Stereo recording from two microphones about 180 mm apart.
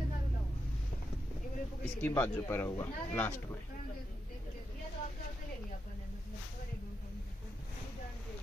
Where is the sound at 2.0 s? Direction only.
10° left (ahead or behind).